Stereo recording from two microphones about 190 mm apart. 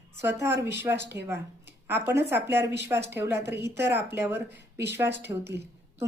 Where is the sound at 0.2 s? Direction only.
15° right (ahead or behind).